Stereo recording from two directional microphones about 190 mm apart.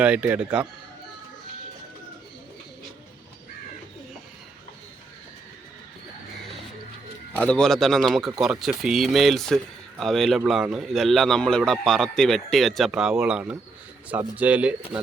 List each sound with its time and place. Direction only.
0.0 s a man's voice: 10° right (ahead or behind)
7.3 s a man's voice: 5° left (ahead or behind)